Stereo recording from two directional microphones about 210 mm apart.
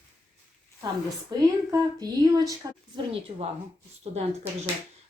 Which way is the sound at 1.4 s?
15° right (ahead or behind).